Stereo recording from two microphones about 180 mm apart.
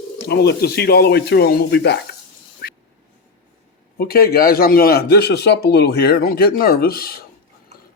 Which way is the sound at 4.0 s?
60° left (ahead or behind).